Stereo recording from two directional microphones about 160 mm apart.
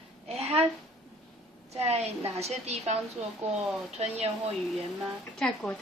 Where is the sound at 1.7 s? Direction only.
40° right (ahead or behind).